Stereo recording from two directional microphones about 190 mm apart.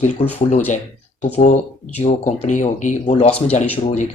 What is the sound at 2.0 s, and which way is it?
Speech, 35° left (ahead or behind).